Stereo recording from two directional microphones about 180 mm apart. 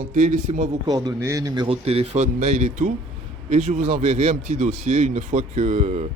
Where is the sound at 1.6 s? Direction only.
35° right (ahead or behind).